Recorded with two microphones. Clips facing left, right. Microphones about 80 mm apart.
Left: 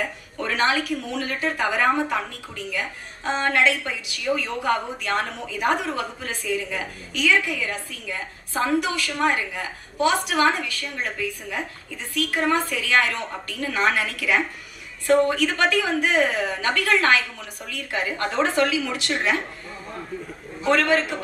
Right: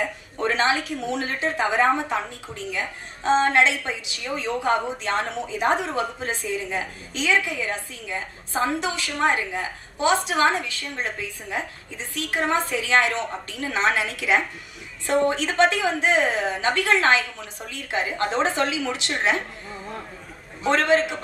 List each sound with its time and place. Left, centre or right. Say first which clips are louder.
0.4 s a woman's voice: even; right
20.7 s a woman's voice: even; right